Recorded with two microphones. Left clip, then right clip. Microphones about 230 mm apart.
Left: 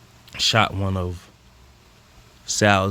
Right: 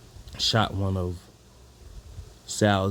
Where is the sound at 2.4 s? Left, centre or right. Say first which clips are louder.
Left 6 dB; left.